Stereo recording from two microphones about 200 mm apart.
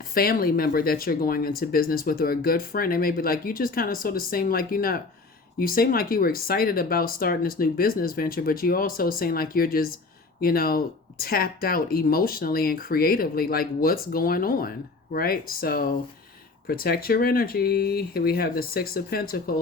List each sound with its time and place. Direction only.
0.0 s speech: 45° left (ahead or behind)